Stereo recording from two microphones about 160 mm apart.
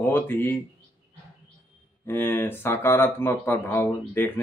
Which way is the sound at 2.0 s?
15° left (ahead or behind).